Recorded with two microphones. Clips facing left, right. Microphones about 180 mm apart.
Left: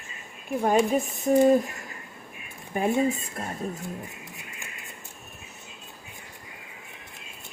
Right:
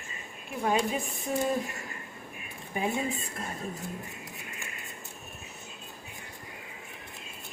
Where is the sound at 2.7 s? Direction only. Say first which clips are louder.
Left 5 dB; 50° left (ahead or behind).